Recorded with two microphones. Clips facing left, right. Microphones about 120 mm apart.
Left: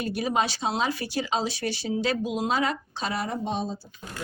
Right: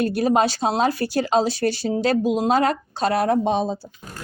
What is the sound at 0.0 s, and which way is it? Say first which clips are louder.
Speech: right 7 dB; 50° right (ahead or behind).